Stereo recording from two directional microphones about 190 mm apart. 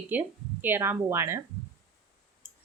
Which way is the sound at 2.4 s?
10° right (ahead or behind).